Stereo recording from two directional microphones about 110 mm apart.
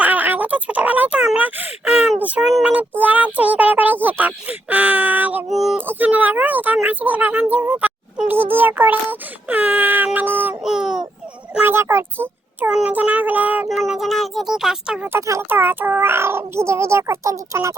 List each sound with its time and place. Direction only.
0.0 s a sound: 15° right (ahead or behind)
3.0 s speech: 15° right (ahead or behind)
5.5 s speech: centre (ahead or behind)
5.7 s speech: 15° right (ahead or behind)
10.6 s speech: 5° right (ahead or behind)
11.6 s speech: 20° right (ahead or behind)
13.7 s speech: centre (ahead or behind)
15.1 s a child's voice: 20° right (ahead or behind)